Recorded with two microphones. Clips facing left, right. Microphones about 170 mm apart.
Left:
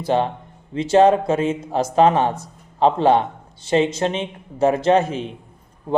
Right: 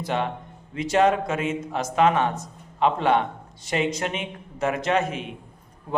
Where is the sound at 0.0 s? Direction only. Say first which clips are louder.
Left 6 dB; 30° left (ahead or behind).